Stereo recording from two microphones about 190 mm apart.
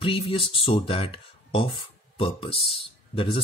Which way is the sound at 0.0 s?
30° left (ahead or behind).